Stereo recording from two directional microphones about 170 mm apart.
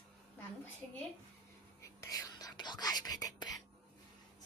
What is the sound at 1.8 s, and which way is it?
Whispering, 20° left (ahead or behind).